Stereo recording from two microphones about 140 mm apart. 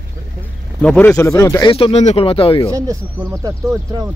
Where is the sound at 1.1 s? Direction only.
20° left (ahead or behind).